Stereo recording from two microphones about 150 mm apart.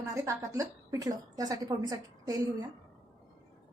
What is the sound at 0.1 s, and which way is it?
A woman's voice, 20° right (ahead or behind).